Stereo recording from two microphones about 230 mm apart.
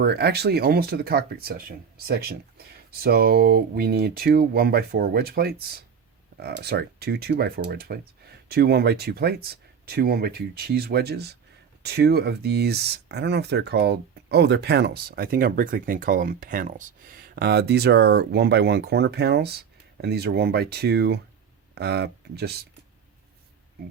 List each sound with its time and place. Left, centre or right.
0.0 s speech: right